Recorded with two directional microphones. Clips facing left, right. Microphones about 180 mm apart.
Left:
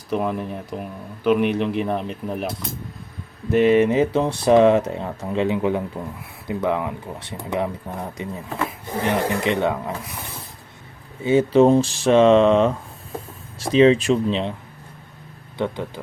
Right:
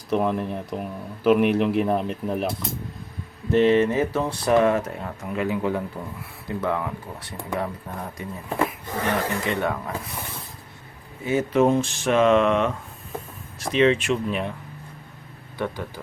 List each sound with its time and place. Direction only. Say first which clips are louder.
0.1 s speech: right 1 dB; centre (ahead or behind)
3.5 s speech: left 2 dB; 15° left (ahead or behind)
11.2 s speech: left 5 dB; 25° left (ahead or behind)
15.5 s speech: left 4 dB; 20° left (ahead or behind)